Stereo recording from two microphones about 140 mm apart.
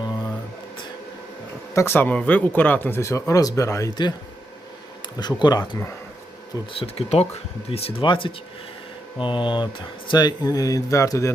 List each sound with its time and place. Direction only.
0.0 s a sound: 30° left (ahead or behind)
1.7 s speech: 15° left (ahead or behind)
6.7 s speech: 45° left (ahead or behind); by 11.3 s 20° left (ahead or behind)